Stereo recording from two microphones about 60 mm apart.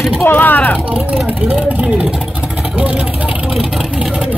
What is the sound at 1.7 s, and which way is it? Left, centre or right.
Speech, right.